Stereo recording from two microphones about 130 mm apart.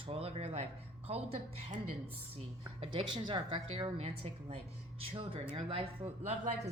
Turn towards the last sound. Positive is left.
turn(degrees=-45)  # may be behind; listen again after turning